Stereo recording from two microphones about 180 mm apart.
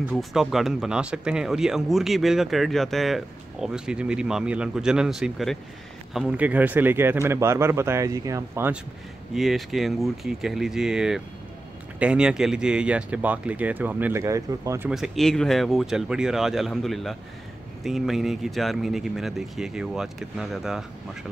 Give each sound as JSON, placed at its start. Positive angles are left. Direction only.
{"t": 0.1, "sound": "speech", "side_deg": 0}
{"t": 9.3, "sound": "speech", "side_deg": 0}
{"t": 14.9, "sound": "speech", "side_deg": 0}